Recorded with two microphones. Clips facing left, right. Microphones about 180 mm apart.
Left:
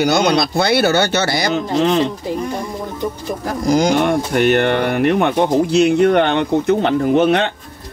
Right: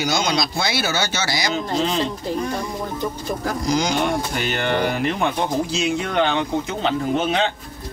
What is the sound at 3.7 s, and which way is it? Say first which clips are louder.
Speech: left 7 dB; 50° left (ahead or behind).